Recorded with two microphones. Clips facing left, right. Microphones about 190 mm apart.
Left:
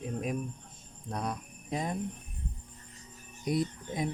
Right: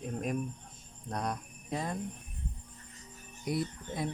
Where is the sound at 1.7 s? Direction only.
20° left (ahead or behind).